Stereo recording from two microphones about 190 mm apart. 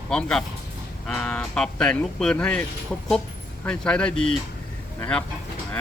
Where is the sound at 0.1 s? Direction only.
5° left (ahead or behind).